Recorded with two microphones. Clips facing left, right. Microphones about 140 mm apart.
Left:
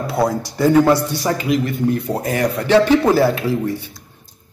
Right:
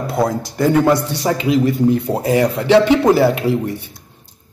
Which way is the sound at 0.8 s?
25° right (ahead or behind).